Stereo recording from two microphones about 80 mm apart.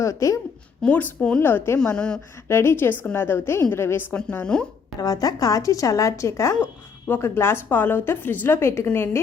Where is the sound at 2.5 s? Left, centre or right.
Left.